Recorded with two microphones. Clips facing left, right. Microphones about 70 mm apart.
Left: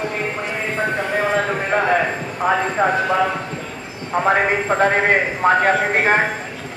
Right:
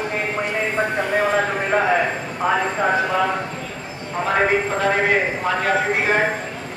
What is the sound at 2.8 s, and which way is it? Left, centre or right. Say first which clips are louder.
Speech: left 3 dB; left.